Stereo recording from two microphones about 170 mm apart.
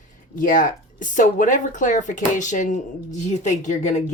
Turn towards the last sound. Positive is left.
turn(degrees=45)  # may be behind; listen again after turning